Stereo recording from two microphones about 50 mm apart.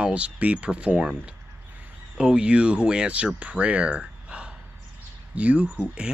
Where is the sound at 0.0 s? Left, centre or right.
Right.